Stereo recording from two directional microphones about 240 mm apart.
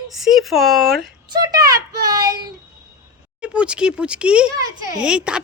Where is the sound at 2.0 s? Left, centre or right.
Centre.